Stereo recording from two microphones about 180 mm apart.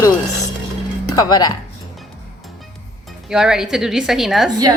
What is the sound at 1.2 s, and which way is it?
Speech, 20° left (ahead or behind).